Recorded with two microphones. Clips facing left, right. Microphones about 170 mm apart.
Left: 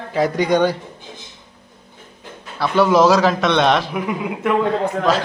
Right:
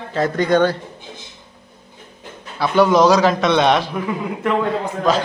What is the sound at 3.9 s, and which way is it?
Speech, 10° left (ahead or behind).